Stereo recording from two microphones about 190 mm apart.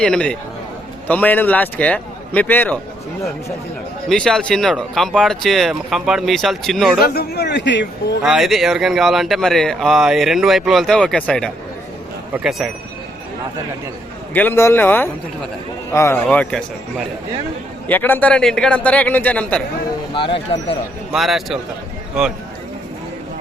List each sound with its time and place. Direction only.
0.0 s a man's voice: 5° left (ahead or behind)
4.1 s speech: 5° left (ahead or behind)
7.0 s speech: 55° left (ahead or behind)
8.2 s speech: centre (ahead or behind)
14.3 s a man's voice: 10° left (ahead or behind)
17.8 s a man's voice: 10° left (ahead or behind)
20.1 s speech: 25° left (ahead or behind)
21.1 s speech: centre (ahead or behind)